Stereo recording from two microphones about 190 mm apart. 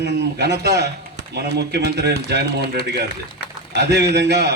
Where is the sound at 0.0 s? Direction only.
65° right (ahead or behind).